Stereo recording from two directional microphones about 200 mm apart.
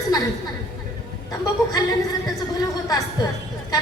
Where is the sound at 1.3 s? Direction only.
20° left (ahead or behind).